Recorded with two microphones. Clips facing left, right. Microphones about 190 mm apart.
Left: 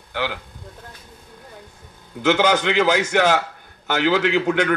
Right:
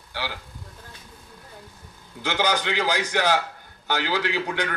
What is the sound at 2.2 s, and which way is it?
A man's voice, 50° left (ahead or behind).